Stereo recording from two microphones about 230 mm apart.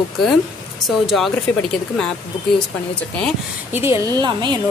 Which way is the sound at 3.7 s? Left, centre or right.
Centre.